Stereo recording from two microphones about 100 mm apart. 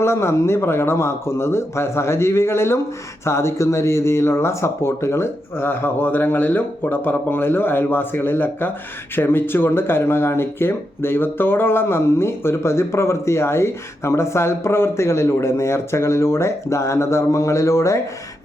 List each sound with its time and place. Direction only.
0.0 s speech: 25° left (ahead or behind)